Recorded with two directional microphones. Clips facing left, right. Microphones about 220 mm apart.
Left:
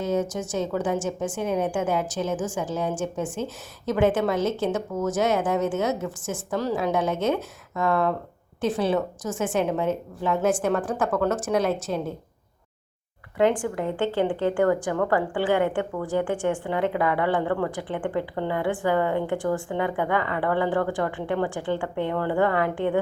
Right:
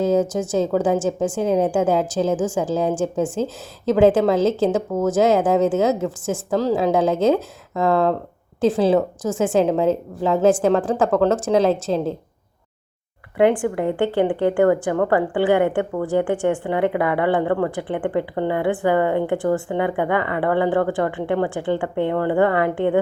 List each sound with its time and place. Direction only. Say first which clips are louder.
0.2 s a woman's voice: right 7 dB; 30° right (ahead or behind)
6.5 s a woman's voice: right 6 dB; 90° right
7.8 s a woman's voice: right 5 dB; 30° right (ahead or behind)
9.3 s a woman's voice: right 7 dB; 25° right (ahead or behind)
13.3 s a woman's voice: right 5 dB; 65° right (ahead or behind)